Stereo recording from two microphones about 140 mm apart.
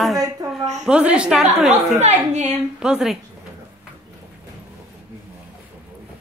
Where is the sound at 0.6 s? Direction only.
55° right (ahead or behind).